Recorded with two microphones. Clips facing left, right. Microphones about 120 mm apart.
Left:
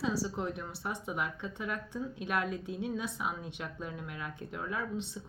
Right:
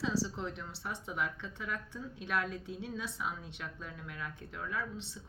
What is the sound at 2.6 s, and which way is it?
Speech, 55° left (ahead or behind).